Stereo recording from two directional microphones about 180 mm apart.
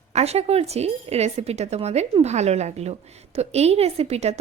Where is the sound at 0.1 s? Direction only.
35° right (ahead or behind).